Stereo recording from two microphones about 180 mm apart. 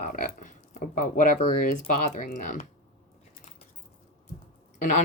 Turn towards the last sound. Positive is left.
turn(degrees=45)  # may be behind; listen again after turning